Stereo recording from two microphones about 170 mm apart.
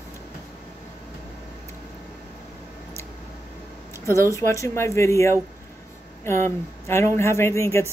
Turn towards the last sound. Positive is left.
turn(degrees=15)  # may be behind; listen again after turning